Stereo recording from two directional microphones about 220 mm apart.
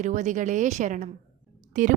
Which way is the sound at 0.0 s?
35° right (ahead or behind).